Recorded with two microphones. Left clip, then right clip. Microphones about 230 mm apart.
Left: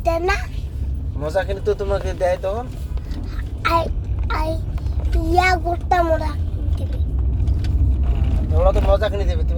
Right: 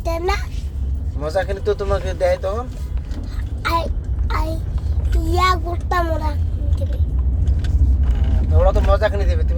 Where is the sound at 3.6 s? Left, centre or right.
Left.